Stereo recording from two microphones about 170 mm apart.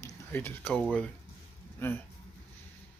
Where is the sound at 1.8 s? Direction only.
10° left (ahead or behind).